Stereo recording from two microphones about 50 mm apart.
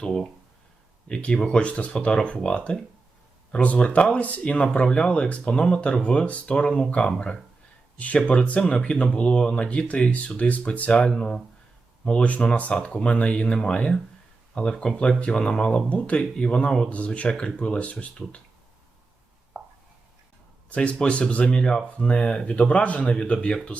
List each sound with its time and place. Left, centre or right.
0.0 s speech: centre
1.0 s speech: left
7.9 s speech: left
11.2 s speech: centre
12.0 s speech: left
19.6 s a sound: centre
20.7 s speech: left